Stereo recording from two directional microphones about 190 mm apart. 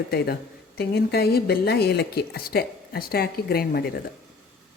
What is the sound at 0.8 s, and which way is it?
Speech, 55° left (ahead or behind).